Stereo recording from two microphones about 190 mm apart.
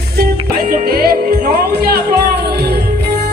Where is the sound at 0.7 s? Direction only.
55° right (ahead or behind).